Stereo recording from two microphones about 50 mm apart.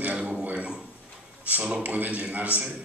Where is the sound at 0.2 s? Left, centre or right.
Right.